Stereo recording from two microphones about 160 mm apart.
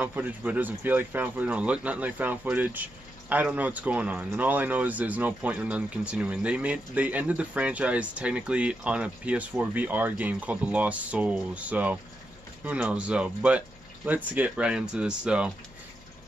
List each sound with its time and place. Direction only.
0.0 s speech: 10° right (ahead or behind)